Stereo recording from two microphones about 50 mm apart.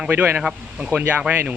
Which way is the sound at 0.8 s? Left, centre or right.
Right.